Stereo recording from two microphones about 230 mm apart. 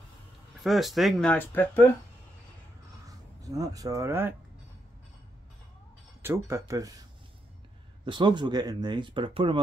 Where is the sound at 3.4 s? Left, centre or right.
Centre.